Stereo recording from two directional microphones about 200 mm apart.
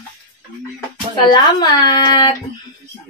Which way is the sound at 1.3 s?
20° left (ahead or behind).